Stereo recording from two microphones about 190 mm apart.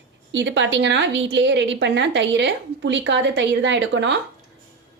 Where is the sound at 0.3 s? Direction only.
70° right (ahead or behind).